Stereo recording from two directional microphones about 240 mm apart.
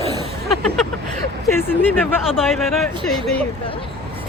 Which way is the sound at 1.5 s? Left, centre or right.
Centre.